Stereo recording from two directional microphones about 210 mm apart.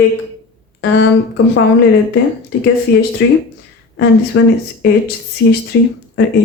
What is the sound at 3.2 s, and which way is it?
A woman's voice, 55° left (ahead or behind).